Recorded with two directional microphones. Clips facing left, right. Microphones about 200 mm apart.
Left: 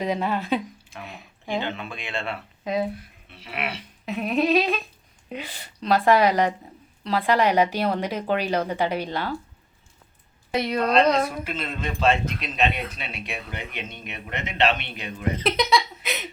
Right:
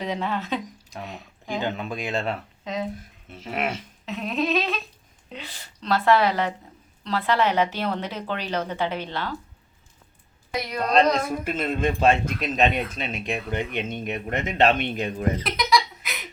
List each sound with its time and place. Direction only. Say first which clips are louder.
0.0 s a woman's voice: left 2 dB; 10° left (ahead or behind)
0.9 s speech: right 5 dB; 40° right (ahead or behind)
2.6 s a woman's voice: left 4 dB; 10° left (ahead or behind)
3.2 s a man's voice: right 4 dB; 45° right (ahead or behind)
4.0 s a woman's voice: left 3 dB; 10° left (ahead or behind)
10.5 s a woman's voice: left 5 dB; 25° left (ahead or behind)
11.4 s a man's voice: right 6 dB; 50° right (ahead or behind)
15.4 s a sound: left 2 dB; 25° left (ahead or behind)